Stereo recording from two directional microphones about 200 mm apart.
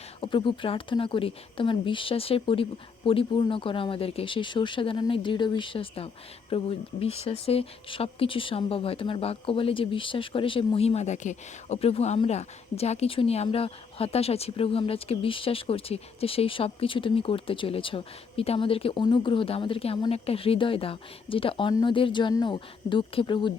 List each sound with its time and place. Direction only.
0.2 s speech: 25° left (ahead or behind)